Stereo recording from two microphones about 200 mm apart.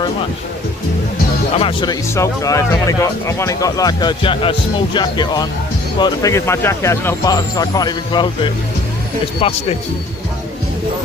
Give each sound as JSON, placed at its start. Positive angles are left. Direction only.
{"t": 1.5, "sound": "speech", "side_deg": 25}